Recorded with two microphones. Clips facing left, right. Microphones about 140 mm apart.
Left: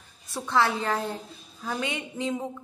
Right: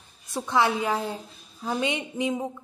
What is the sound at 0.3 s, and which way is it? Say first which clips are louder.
A woman's voice: right 1 dB; 15° right (ahead or behind).